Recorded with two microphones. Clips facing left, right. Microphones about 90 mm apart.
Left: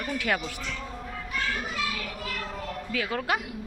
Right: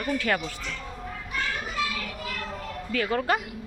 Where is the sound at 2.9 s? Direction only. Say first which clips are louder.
Right 4 dB; 5° left (ahead or behind).